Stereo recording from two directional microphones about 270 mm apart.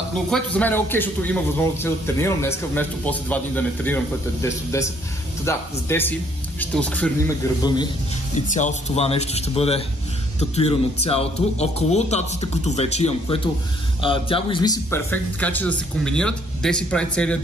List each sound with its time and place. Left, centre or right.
0.3 s a man's voice: centre
7.6 s a man's voice: centre
8.5 s a man's voice: left; by 17.4 s centre